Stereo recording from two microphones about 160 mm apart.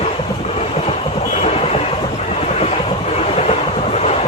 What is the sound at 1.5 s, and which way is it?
Train, 40° left (ahead or behind).